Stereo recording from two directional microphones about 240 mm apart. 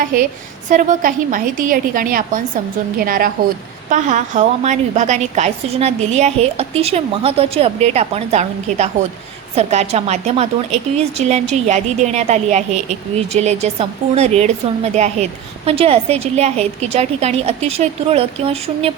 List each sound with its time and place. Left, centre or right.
0.0 s a woman's voice: right